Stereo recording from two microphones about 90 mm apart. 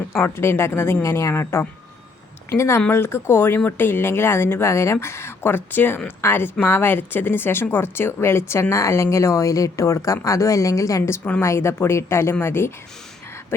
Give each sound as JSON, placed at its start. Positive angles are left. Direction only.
{"t": 0.1, "sound": "speech", "side_deg": 30}
{"t": 11.2, "sound": "speech", "side_deg": 20}
{"t": 11.4, "sound": "speech", "side_deg": 30}